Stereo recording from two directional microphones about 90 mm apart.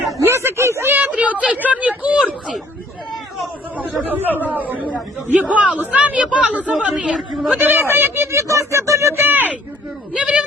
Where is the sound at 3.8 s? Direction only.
20° right (ahead or behind).